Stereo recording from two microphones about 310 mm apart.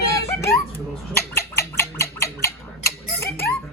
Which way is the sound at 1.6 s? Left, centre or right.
Centre.